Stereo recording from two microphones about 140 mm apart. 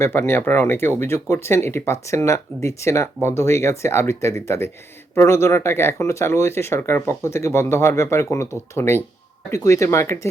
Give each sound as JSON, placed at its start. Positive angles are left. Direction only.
{"t": 0.0, "sound": "speech", "side_deg": 15}